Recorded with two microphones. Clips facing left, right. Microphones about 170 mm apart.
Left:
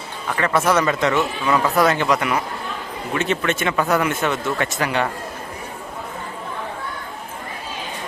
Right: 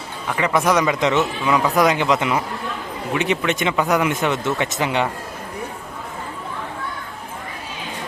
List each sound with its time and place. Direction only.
0.3 s speech: 15° right (ahead or behind)